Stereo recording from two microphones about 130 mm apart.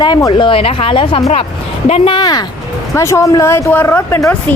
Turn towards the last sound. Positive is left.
turn(degrees=20)  # may be behind; listen again after turning